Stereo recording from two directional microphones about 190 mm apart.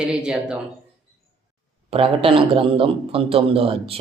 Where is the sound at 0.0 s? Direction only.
5° right (ahead or behind).